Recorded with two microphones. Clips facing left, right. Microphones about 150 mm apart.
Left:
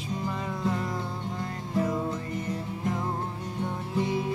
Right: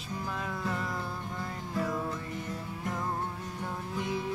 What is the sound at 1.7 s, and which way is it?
Music, 20° left (ahead or behind).